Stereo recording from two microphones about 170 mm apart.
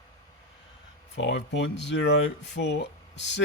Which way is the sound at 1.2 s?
90° left.